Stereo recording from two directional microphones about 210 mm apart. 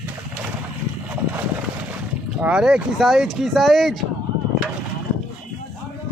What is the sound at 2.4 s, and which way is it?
A man's voice, 5° right (ahead or behind).